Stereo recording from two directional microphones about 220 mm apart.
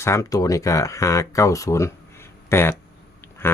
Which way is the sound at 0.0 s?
10° left (ahead or behind).